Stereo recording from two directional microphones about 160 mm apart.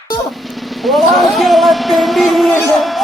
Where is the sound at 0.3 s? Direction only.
Centre (ahead or behind).